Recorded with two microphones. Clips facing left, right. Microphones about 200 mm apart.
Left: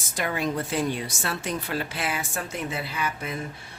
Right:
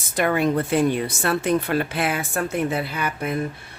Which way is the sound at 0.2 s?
60° right (ahead or behind).